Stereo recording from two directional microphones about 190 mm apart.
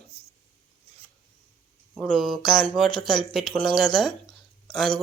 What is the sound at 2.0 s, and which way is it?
Speech, centre (ahead or behind).